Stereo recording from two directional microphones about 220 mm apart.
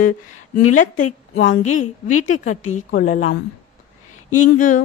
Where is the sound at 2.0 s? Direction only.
75° left (ahead or behind).